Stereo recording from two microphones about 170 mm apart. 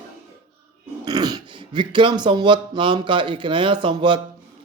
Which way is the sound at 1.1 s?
25° right (ahead or behind).